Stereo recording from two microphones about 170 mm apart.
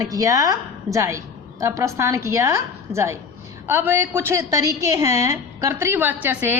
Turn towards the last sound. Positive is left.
turn(degrees=-10)  # may be behind; listen again after turning